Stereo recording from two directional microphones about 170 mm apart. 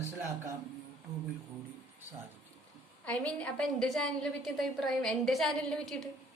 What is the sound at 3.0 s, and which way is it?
A woman's voice, 10° left (ahead or behind).